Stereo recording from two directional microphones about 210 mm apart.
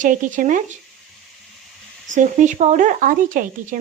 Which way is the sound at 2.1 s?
35° right (ahead or behind).